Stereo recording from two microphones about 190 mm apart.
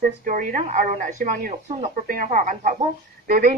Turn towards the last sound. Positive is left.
turn(degrees=-45)  # may be behind; listen again after turning